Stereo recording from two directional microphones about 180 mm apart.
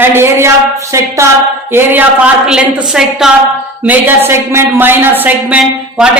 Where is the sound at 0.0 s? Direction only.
10° right (ahead or behind).